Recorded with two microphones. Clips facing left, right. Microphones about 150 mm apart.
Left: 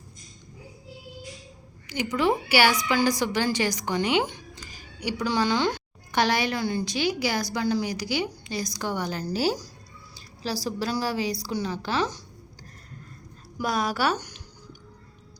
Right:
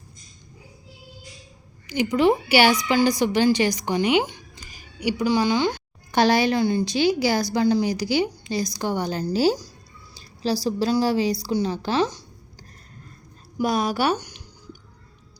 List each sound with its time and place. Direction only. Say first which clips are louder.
1.9 s a woman's voice: right 5 dB; 20° right (ahead or behind); by 5.8 s 5° right (ahead or behind)
6.1 s a woman's voice: right 5 dB; 30° right (ahead or behind)
13.6 s a woman's voice: right 4 dB; 20° right (ahead or behind)
14.2 s a sound: right 1 dB; 10° right (ahead or behind)